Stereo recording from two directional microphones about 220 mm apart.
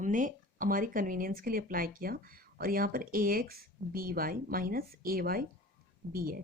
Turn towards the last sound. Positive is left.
turn(degrees=-40)  # may be behind; listen again after turning